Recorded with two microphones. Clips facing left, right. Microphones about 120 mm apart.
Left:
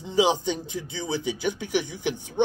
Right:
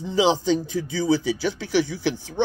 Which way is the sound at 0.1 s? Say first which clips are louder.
Right 3 dB; 20° left (ahead or behind).